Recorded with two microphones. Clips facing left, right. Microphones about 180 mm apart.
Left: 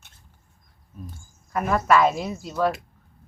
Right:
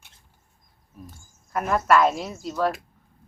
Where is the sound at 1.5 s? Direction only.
Centre (ahead or behind).